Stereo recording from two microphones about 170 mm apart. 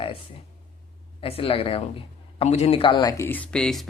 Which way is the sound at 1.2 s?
35° left (ahead or behind).